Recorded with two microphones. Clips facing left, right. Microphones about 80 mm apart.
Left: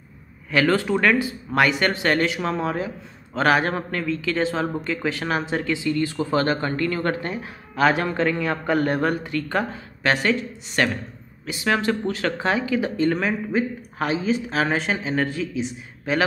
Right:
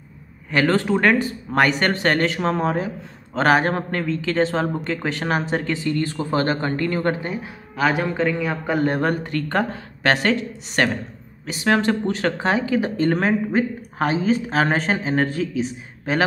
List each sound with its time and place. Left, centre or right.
0.5 s a man's voice: right
1.2 s speech: right
7.2 s a man's voice: centre
8.8 s speech: right
10.8 s speech: right